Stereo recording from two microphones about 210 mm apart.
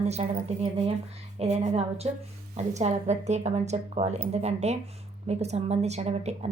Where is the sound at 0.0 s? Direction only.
30° right (ahead or behind).